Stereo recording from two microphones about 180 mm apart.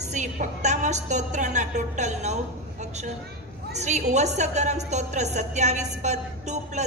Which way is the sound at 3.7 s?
40° right (ahead or behind).